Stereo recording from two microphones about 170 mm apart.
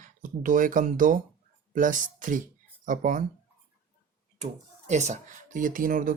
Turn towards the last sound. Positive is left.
turn(degrees=-55)  # may be behind; listen again after turning